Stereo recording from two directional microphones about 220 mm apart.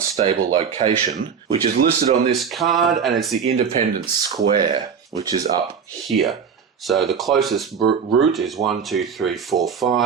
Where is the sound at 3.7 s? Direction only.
35° right (ahead or behind).